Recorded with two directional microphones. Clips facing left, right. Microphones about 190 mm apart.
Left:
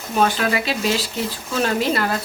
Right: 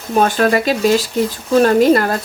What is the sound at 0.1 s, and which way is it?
Speech, 45° right (ahead or behind).